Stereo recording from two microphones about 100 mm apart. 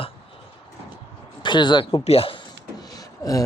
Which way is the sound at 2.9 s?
35° left (ahead or behind).